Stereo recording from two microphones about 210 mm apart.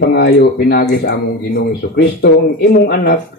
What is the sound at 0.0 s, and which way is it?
Speech, 55° left (ahead or behind).